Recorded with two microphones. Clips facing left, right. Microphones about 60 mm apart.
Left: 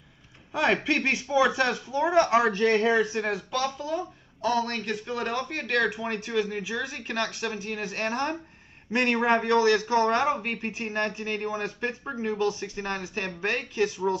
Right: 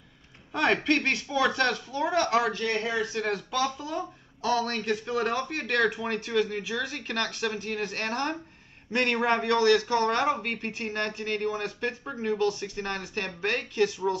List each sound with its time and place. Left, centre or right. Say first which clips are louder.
0.5 s speech: even; centre; by 3.3 s left
3.3 s speech: even; centre